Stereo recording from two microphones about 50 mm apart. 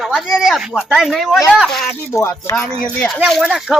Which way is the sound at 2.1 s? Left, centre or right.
Left.